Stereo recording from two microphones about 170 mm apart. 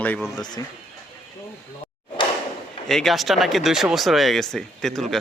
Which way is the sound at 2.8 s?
Centre (ahead or behind).